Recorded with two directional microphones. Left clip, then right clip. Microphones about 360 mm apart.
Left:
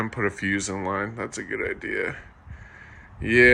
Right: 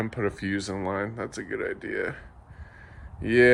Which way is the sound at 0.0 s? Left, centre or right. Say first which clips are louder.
Left 3 dB; centre.